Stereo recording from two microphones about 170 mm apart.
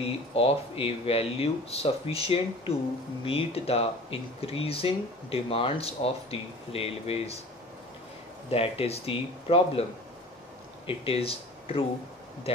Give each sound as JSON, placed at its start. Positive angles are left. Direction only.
{"t": 0.0, "sound": "speech", "side_deg": 35}
{"t": 8.5, "sound": "speech", "side_deg": 35}
{"t": 10.9, "sound": "speech", "side_deg": 35}